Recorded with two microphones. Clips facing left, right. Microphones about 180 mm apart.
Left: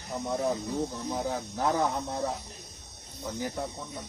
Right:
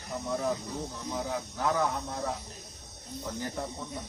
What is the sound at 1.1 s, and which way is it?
Speech, 35° left (ahead or behind).